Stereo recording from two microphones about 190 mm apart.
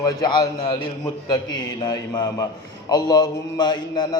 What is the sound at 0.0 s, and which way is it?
A man's voice, 20° left (ahead or behind).